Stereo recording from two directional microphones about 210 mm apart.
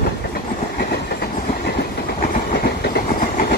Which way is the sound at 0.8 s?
50° left (ahead or behind).